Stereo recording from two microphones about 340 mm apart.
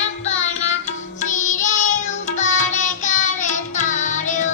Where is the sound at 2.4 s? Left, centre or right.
Left.